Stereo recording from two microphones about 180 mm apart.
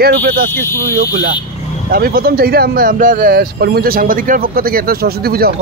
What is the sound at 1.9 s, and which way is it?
Speech, 55° right (ahead or behind).